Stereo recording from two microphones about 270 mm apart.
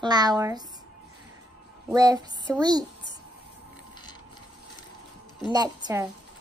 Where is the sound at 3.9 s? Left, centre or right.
Centre.